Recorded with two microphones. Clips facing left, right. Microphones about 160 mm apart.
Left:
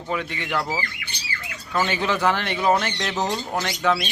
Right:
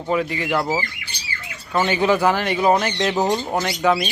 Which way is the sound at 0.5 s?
25° right (ahead or behind).